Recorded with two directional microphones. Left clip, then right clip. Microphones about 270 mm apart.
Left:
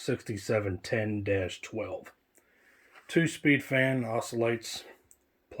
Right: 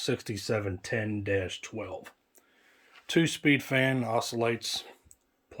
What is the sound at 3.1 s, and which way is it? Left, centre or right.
Speech, centre.